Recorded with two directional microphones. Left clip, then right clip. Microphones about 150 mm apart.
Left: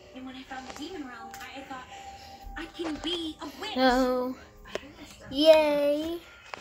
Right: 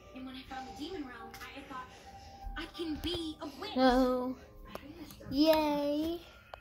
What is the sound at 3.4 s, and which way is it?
A child's voice, centre (ahead or behind).